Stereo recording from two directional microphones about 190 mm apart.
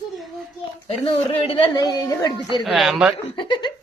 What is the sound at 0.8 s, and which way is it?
A woman's voice, 30° left (ahead or behind).